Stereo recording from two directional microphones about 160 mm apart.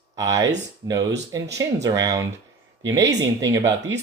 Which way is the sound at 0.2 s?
20° right (ahead or behind).